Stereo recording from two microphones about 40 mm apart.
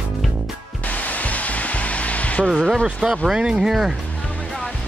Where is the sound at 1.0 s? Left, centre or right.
Left.